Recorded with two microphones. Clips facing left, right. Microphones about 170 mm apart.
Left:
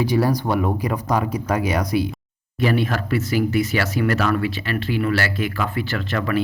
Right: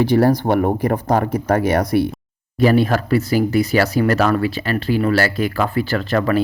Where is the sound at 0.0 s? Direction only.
55° right (ahead or behind).